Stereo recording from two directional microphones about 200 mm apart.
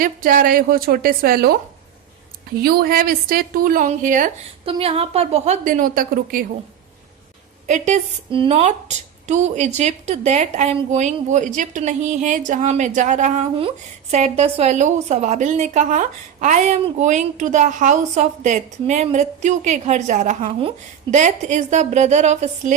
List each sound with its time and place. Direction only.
0.0 s a woman's voice: 45° right (ahead or behind)
2.6 s a woman's voice: 50° right (ahead or behind)
4.6 s a woman's voice: 30° right (ahead or behind); by 6.4 s 45° right (ahead or behind)
7.7 s a woman's voice: 35° right (ahead or behind)